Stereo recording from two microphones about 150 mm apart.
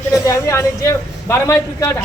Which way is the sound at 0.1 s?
20° left (ahead or behind).